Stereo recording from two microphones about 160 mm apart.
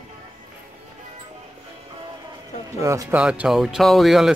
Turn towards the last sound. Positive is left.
turn(degrees=0)  # may be behind; listen again after turning